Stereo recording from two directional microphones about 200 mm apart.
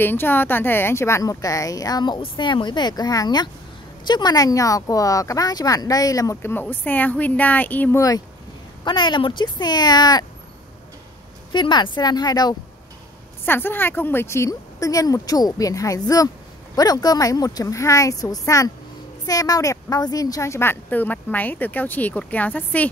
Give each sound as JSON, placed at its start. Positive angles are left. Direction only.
{"t": 0.0, "sound": "speech", "side_deg": 10}
{"t": 11.5, "sound": "speech", "side_deg": 25}